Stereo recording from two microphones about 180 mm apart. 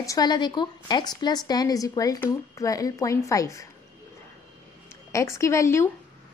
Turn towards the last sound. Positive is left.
turn(degrees=15)  # may be behind; listen again after turning